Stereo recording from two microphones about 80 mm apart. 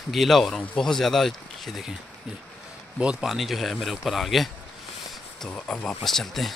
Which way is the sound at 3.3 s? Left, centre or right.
Centre.